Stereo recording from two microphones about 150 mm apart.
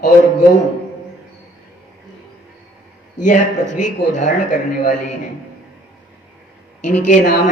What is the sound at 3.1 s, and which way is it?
Speech, 55° left (ahead or behind).